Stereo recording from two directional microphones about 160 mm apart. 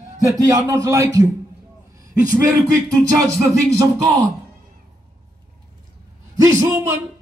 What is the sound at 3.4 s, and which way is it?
Speech, 20° right (ahead or behind).